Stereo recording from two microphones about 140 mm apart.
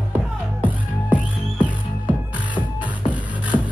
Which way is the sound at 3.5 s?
35° left (ahead or behind).